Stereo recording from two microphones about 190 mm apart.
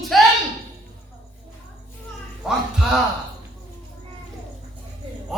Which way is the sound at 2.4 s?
5° right (ahead or behind).